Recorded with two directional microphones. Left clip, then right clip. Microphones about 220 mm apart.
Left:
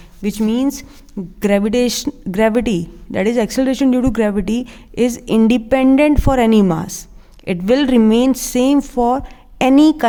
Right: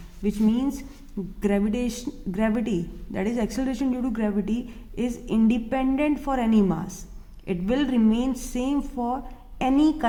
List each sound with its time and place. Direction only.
0.2 s speech: 45° left (ahead or behind)